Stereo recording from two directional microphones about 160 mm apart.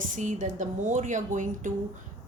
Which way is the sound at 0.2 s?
50° right (ahead or behind).